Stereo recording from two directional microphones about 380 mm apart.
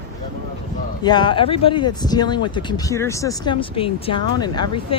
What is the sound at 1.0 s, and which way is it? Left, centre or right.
A woman's voice, centre.